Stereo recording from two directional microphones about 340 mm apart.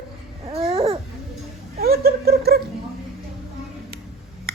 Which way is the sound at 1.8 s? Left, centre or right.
Right.